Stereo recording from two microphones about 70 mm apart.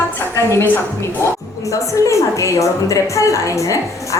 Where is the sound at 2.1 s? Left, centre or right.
Left.